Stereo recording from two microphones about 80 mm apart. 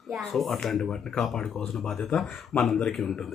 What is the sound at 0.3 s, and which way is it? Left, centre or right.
Speech, centre.